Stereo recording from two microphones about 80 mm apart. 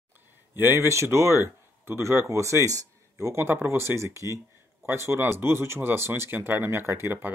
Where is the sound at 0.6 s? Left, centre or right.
Right.